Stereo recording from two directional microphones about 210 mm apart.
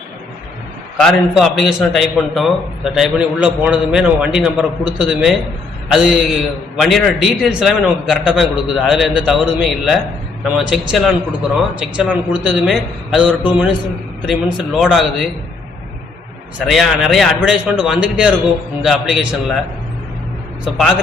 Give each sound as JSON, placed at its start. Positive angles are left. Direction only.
{"t": 1.0, "sound": "a man's voice", "side_deg": 0}
{"t": 16.6, "sound": "a man's voice", "side_deg": 0}
{"t": 20.7, "sound": "a man's voice", "side_deg": 0}